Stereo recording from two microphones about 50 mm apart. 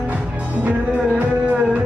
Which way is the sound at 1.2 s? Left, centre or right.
Right.